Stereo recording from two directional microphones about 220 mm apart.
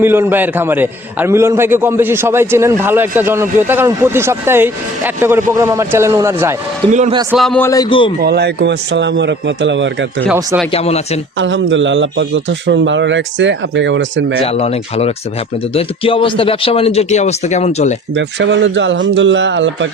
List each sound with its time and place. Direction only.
0.0 s a man's voice: 10° right (ahead or behind)
6.9 s a man's voice: 35° right (ahead or behind)
7.3 s a man's voice: 5° left (ahead or behind); by 8.1 s 20° left (ahead or behind)
8.2 s speech: 50° right (ahead or behind)
10.7 s speech: 30° left (ahead or behind)
11.3 s a man's voice: 55° right (ahead or behind)
14.4 s speech: 30° left (ahead or behind)
18.1 s a man's voice: 55° right (ahead or behind)